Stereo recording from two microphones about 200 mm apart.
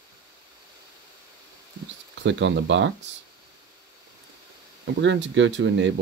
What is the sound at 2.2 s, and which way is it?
Speech, 65° right (ahead or behind).